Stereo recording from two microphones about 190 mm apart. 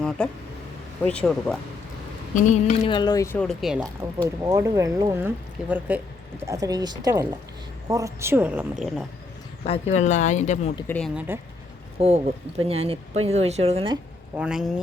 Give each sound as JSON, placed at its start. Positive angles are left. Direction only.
{"t": 0.2, "sound": "speech", "side_deg": 5}
{"t": 2.3, "sound": "speech", "side_deg": 40}
{"t": 2.8, "sound": "speech", "side_deg": 25}
{"t": 3.3, "sound": "speech", "side_deg": 0}
{"t": 4.4, "sound": "a woman's voice", "side_deg": -20}
{"t": 9.6, "sound": "speech", "side_deg": 35}
{"t": 10.8, "sound": "speech", "side_deg": 5}
{"t": 11.1, "sound": "speech", "side_deg": -5}
{"t": 11.9, "sound": "speech", "side_deg": -30}
{"t": 14.3, "sound": "speech", "side_deg": -5}